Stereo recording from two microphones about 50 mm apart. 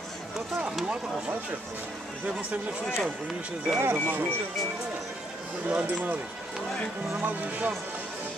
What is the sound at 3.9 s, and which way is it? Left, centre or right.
Speech, right.